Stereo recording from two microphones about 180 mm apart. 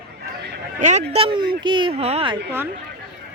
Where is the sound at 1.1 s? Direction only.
30° right (ahead or behind).